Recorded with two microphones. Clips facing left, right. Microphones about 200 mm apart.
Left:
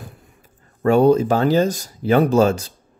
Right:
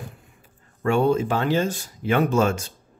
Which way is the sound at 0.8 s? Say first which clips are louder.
Left 6 dB; 40° left (ahead or behind).